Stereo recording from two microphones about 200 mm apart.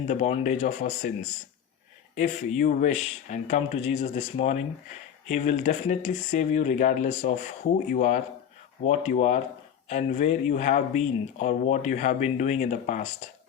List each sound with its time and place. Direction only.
0.0 s speech: 35° left (ahead or behind)
2.1 s speech: 40° left (ahead or behind)